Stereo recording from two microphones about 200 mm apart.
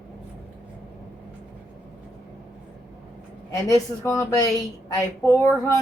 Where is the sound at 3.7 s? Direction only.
15° left (ahead or behind).